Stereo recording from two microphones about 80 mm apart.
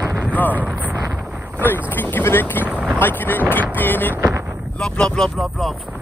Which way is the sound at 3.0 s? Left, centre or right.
Left.